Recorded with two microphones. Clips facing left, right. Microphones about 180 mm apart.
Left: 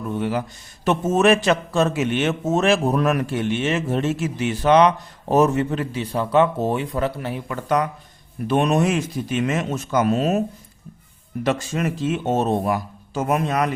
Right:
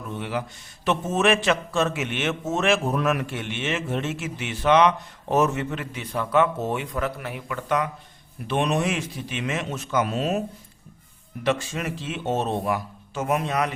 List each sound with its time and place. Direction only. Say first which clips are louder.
0.1 s a sound: left 5 dB; 40° left (ahead or behind)
0.9 s a man's voice: left 5 dB; 40° left (ahead or behind)
11.4 s speech: left 3 dB; 40° left (ahead or behind)